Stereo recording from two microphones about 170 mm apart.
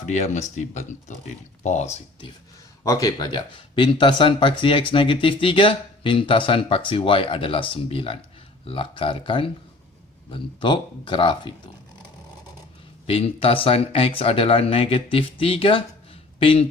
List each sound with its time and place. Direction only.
0.0 s speech: 45° left (ahead or behind)
2.8 s speech: 20° left (ahead or behind)
13.1 s speech: 35° left (ahead or behind)